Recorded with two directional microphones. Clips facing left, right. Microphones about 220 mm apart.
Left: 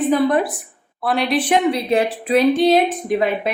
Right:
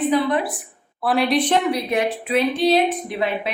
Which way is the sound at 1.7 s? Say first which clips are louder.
Left 3 dB; 30° left (ahead or behind).